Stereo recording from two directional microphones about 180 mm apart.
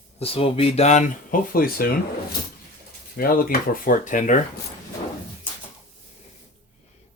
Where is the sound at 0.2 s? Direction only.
30° left (ahead or behind); by 1.9 s 55° left (ahead or behind).